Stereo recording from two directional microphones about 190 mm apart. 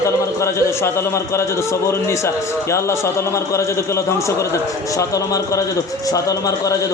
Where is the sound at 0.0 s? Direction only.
15° left (ahead or behind).